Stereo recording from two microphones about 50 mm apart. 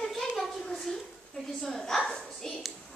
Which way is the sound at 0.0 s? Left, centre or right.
Centre.